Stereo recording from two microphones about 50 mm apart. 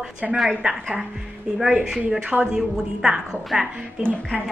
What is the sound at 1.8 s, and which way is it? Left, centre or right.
A woman's voice, centre.